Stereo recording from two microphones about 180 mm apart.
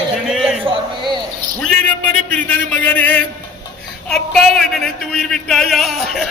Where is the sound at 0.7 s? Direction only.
25° right (ahead or behind).